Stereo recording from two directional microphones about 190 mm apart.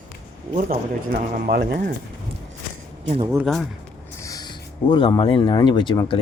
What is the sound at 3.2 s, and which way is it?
Speech, 15° right (ahead or behind).